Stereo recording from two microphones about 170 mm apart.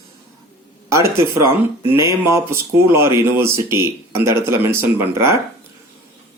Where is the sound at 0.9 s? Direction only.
15° right (ahead or behind).